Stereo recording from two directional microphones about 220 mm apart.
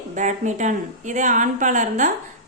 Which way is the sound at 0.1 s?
35° right (ahead or behind).